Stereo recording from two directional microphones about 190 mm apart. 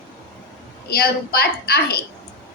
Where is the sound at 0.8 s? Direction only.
55° left (ahead or behind).